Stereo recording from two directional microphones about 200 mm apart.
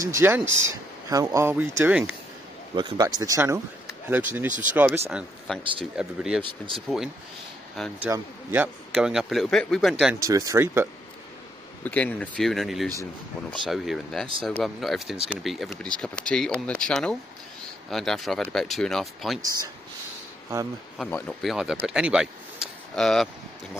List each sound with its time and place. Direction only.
0.0 s speech: 15° right (ahead or behind)
2.7 s speech: 20° right (ahead or behind)
5.6 s speech: 25° right (ahead or behind)
5.9 s a man's voice: 5° right (ahead or behind)
7.7 s a man's voice: centre (ahead or behind)
8.1 s a man's voice: 10° right (ahead or behind)
10.2 s speech: 15° right (ahead or behind)
11.8 s a man's voice: 10° left (ahead or behind)
21.0 s a man's voice: 5° left (ahead or behind)